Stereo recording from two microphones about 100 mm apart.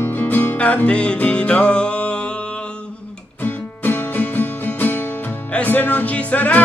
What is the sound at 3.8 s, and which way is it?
Music, 20° left (ahead or behind).